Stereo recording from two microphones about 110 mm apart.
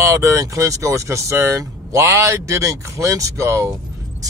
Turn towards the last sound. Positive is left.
turn(degrees=-25)  # may be behind; listen again after turning